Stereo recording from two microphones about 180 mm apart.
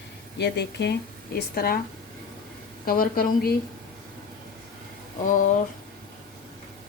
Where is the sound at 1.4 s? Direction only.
55° left (ahead or behind).